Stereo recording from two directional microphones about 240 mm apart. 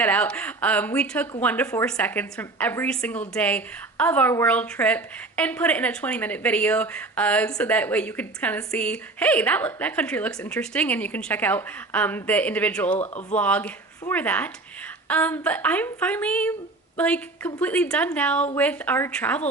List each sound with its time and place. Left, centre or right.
0.0 s a woman's voice: centre